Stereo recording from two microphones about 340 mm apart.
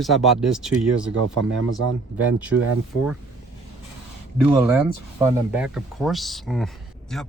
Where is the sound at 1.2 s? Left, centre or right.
Right.